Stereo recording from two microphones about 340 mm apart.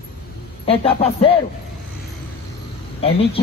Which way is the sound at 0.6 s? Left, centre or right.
Centre.